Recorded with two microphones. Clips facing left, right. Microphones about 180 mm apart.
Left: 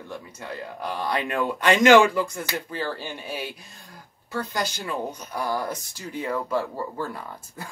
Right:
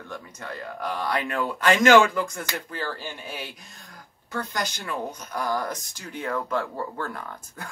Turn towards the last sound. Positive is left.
turn(degrees=10)  # may be behind; listen again after turning